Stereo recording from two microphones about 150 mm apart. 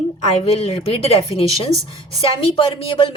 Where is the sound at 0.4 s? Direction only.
40° left (ahead or behind).